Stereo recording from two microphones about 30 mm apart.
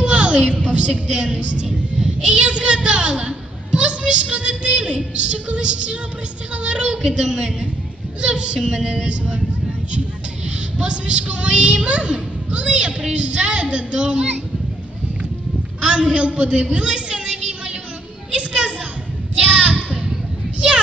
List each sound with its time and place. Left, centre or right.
0.0 s a woman's voice: right
7.0 s speech: right
10.8 s speech: right
15.8 s speech: right
18.3 s a sound: right
19.5 s child singing: right